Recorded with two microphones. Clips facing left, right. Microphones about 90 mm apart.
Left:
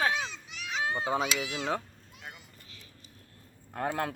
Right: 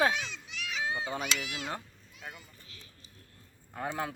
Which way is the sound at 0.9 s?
60° left (ahead or behind).